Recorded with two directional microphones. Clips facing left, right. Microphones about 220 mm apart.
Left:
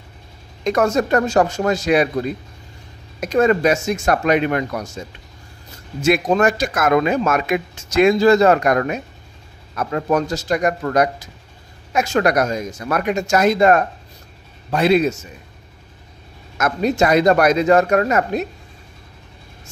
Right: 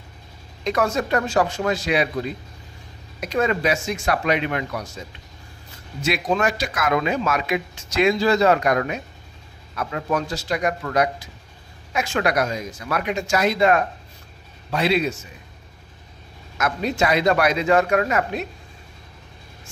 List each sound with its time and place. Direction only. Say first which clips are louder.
0.7 s speech: left 5 dB; 45° left (ahead or behind)
16.5 s speech: left 5 dB; 45° left (ahead or behind)